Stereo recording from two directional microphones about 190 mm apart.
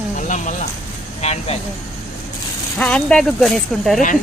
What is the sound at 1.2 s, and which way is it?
Speech, 35° left (ahead or behind).